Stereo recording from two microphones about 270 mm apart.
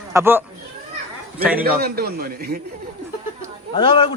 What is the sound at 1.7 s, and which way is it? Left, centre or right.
Speech, right.